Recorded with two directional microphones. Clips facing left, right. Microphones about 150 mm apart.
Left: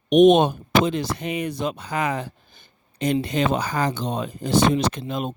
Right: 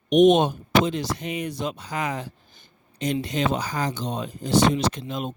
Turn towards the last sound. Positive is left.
turn(degrees=55)  # may be behind; listen again after turning